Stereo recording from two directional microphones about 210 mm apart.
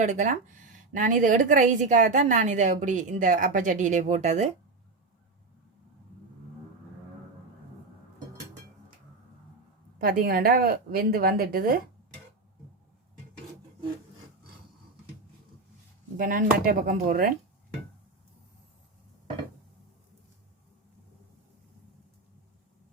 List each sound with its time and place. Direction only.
0.0 s a woman's voice: 35° right (ahead or behind)
10.0 s a woman's voice: 45° right (ahead or behind)
16.1 s a woman's voice: 40° right (ahead or behind)